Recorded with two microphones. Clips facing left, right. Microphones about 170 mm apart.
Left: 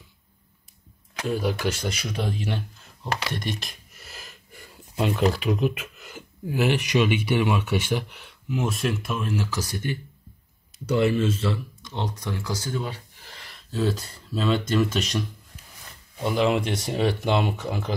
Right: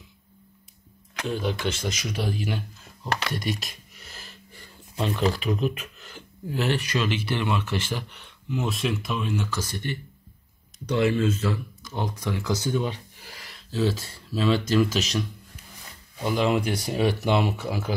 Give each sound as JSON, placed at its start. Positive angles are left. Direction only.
{"t": 1.2, "sound": "speech", "side_deg": 5}
{"t": 2.0, "sound": "speech", "side_deg": -5}
{"t": 12.3, "sound": "speech", "side_deg": -15}